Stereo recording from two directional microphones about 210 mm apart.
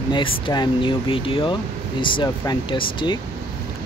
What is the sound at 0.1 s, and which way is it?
Speech, 20° left (ahead or behind).